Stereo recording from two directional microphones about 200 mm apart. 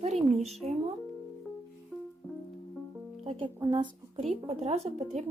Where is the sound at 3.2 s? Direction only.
25° right (ahead or behind).